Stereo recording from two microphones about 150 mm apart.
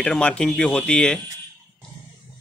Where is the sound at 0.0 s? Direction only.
5° left (ahead or behind).